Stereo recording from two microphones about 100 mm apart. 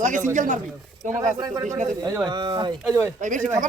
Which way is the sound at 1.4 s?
40° right (ahead or behind).